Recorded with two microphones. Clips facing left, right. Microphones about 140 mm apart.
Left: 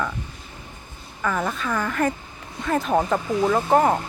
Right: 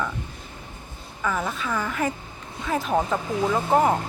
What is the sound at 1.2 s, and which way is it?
Speech, 5° right (ahead or behind).